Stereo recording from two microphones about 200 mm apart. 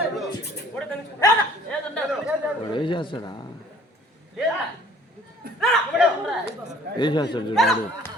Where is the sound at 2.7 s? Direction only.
25° left (ahead or behind).